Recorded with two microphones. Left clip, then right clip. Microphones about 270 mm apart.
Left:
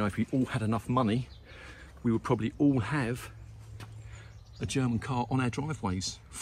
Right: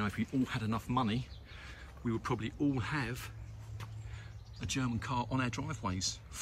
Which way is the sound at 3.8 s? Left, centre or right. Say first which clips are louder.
Left 1 dB; centre.